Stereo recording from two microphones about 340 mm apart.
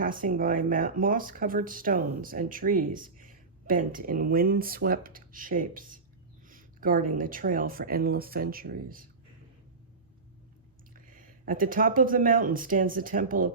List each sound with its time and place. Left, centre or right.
0.0 s speech: right
10.9 s speech: right